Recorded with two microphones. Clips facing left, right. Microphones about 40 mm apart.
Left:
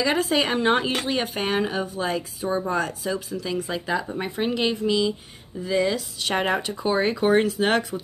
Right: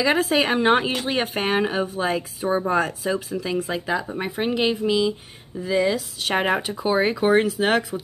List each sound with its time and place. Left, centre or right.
0.0 s speech: centre